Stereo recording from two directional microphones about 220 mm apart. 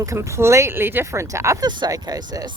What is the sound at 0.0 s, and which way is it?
Speech, 15° right (ahead or behind).